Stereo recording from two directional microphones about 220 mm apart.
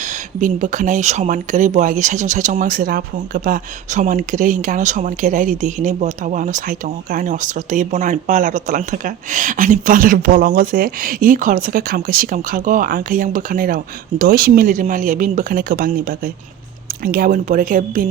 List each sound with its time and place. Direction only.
0.0 s speech: 35° right (ahead or behind)